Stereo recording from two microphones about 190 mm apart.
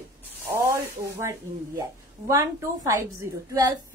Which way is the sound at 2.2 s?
15° right (ahead or behind).